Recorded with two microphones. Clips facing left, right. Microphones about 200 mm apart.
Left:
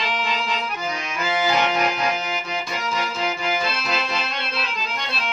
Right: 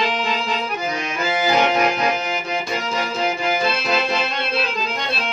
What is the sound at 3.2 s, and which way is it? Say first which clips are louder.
Accordion: right 4 dB; 55° right (ahead or behind).